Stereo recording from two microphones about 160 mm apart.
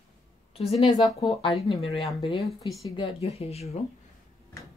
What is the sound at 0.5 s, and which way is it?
Speech, 40° left (ahead or behind).